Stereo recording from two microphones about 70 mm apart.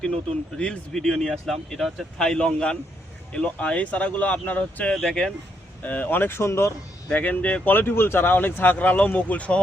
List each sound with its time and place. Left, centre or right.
0.0 s speech: centre
4.9 s speech: centre
5.8 s speech: left
7.1 s speech: left